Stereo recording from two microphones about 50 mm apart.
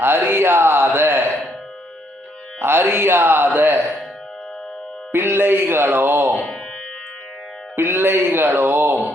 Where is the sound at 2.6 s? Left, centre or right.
Right.